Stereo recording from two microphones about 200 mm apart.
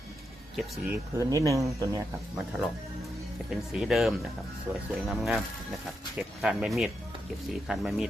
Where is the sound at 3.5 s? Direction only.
Centre (ahead or behind).